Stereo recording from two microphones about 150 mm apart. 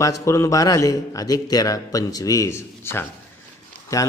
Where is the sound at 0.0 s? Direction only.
20° left (ahead or behind).